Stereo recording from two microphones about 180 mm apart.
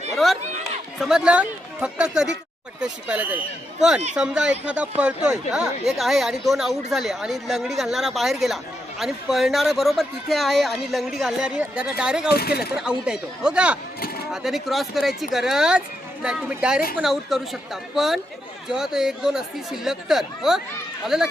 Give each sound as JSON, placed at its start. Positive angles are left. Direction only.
{"t": 0.2, "sound": "speech", "side_deg": 0}
{"t": 12.3, "sound": "speech", "side_deg": 60}
{"t": 12.7, "sound": "speech", "side_deg": -5}